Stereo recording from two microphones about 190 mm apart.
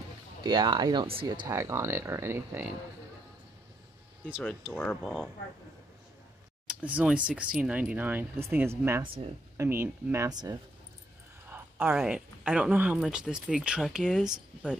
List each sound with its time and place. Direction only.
0.4 s speech: 25° right (ahead or behind)
4.7 s speech: 10° left (ahead or behind)
6.7 s speech: 5° right (ahead or behind)